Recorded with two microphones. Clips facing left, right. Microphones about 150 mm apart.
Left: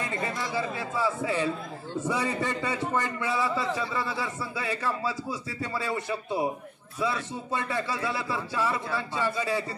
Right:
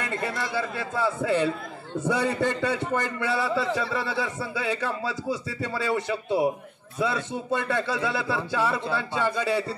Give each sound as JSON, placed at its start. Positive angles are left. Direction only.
{"t": 0.0, "sound": "a man's voice", "side_deg": -80}